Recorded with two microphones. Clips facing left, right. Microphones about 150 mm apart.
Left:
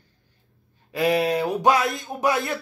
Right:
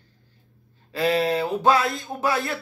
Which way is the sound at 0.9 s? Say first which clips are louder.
Left 1 dB; 15° left (ahead or behind).